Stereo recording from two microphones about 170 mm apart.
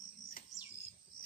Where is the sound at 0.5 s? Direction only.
Centre (ahead or behind).